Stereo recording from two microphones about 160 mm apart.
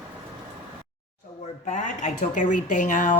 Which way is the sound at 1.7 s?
50° left (ahead or behind).